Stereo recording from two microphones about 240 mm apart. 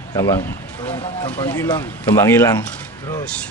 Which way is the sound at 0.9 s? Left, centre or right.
Left.